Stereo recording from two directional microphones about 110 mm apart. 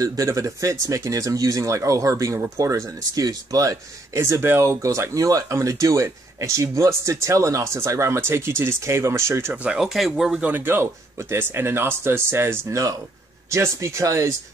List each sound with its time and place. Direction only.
0.0 s speech: 30° right (ahead or behind)
9.5 s speech: 10° right (ahead or behind)
9.8 s speech: centre (ahead or behind)
10.4 s speech: 15° right (ahead or behind)